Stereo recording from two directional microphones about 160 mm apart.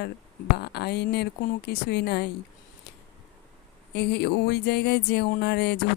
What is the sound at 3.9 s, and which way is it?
Speech, 90° left.